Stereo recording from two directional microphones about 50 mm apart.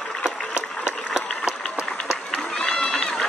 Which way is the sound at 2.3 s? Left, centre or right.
Centre.